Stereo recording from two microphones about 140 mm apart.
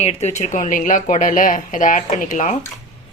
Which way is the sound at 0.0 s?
50° left (ahead or behind).